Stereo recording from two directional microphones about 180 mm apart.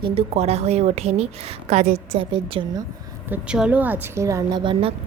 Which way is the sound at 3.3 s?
5° right (ahead or behind).